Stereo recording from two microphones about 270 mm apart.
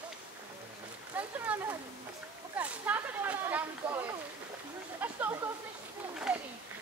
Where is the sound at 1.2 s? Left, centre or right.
Centre.